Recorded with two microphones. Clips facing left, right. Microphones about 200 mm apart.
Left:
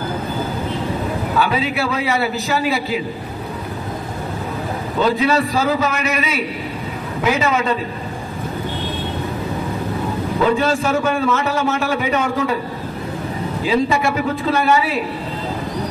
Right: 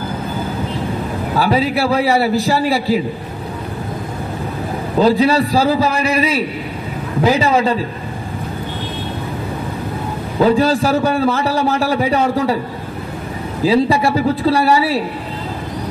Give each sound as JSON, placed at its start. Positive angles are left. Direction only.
{"t": 1.3, "sound": "a man's voice", "side_deg": -35}
{"t": 4.9, "sound": "a man's voice", "side_deg": -35}
{"t": 10.4, "sound": "a man's voice", "side_deg": -35}
{"t": 13.7, "sound": "a man's voice", "side_deg": -35}